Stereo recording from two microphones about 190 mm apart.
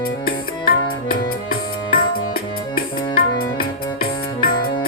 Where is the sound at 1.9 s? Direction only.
50° left (ahead or behind).